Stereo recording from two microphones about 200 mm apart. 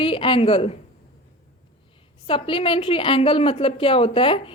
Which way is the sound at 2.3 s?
25° left (ahead or behind).